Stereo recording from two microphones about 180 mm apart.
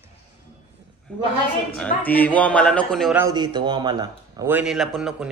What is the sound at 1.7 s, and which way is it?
Speech, 10° left (ahead or behind).